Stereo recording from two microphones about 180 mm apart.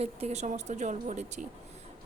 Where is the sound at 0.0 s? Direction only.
35° right (ahead or behind).